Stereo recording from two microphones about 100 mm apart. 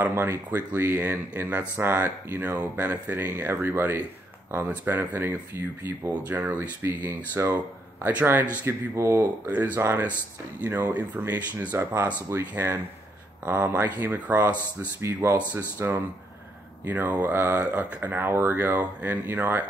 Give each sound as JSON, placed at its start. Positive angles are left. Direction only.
{"t": 0.0, "sound": "speech", "side_deg": -25}
{"t": 8.6, "sound": "speech", "side_deg": -25}